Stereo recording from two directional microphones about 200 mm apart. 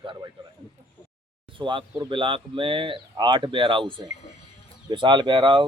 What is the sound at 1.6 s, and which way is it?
Speech, 25° right (ahead or behind).